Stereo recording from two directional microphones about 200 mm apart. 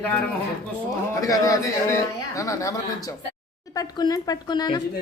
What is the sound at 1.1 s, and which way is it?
A man's voice, 15° left (ahead or behind).